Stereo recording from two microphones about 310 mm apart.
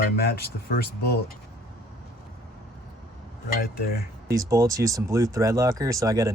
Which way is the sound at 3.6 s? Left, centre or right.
Left.